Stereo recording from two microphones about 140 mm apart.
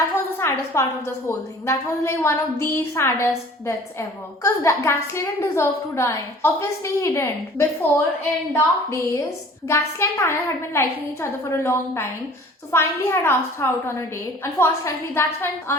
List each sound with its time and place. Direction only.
0.0 s a woman's voice: 20° left (ahead or behind)
4.4 s a woman's voice: 20° left (ahead or behind)